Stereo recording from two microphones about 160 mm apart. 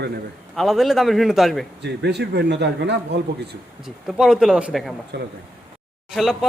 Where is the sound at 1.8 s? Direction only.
90° right.